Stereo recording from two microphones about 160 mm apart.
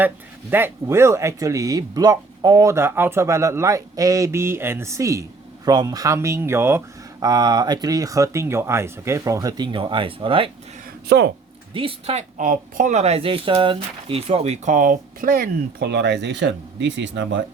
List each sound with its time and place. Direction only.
0.5 s speech: 15° right (ahead or behind); by 10.5 s 35° right (ahead or behind)
11.7 s speech: 35° right (ahead or behind)
12.4 s speech: 55° right (ahead or behind); by 17.4 s 90° right